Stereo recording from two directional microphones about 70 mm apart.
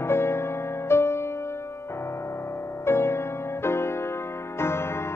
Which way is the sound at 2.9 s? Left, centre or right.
Left.